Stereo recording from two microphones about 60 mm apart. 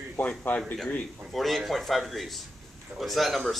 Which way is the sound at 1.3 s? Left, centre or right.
Centre.